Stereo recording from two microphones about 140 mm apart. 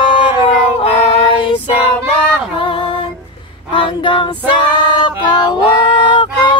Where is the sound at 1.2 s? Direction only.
40° left (ahead or behind).